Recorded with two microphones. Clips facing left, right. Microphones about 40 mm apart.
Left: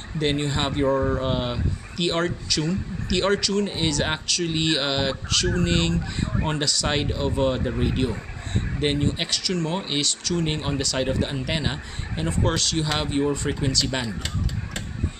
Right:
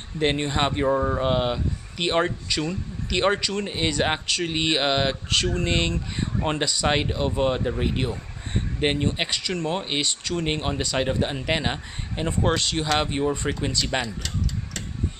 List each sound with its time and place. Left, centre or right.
0.2 s speech: right